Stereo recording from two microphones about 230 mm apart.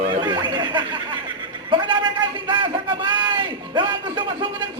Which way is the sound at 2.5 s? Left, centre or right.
Right.